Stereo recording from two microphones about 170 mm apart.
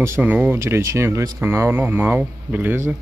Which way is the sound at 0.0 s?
15° right (ahead or behind).